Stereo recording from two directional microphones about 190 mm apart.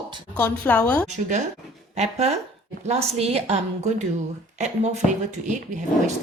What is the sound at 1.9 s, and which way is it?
Speech, 35° right (ahead or behind).